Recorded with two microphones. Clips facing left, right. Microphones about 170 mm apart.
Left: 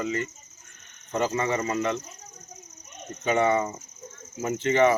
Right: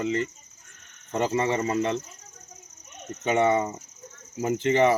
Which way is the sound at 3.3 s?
25° right (ahead or behind).